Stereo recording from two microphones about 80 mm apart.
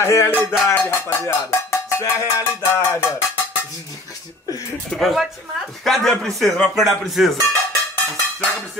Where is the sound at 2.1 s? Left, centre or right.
Left.